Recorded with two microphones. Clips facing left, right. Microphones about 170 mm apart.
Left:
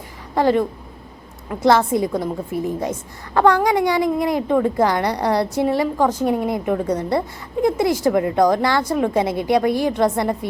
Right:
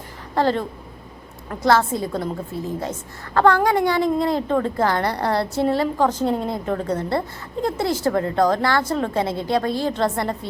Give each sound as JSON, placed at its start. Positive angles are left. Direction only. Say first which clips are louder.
{"t": 0.3, "sound": "a woman's voice", "louder": "left 3 dB", "side_deg": 15}